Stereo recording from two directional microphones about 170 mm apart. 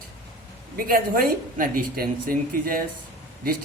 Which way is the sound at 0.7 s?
55° right (ahead or behind).